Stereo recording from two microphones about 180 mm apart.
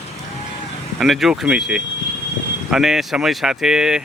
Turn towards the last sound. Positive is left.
turn(degrees=-5)  # may be behind; listen again after turning